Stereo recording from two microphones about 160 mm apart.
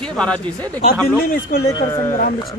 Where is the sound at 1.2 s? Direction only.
65° left (ahead or behind).